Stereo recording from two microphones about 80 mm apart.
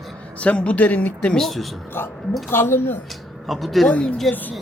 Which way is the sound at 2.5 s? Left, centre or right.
Left.